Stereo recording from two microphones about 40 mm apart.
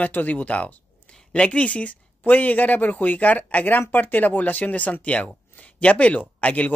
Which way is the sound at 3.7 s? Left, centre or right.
Left.